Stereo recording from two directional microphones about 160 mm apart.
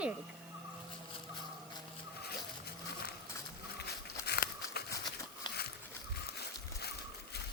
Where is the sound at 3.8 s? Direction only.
90° left.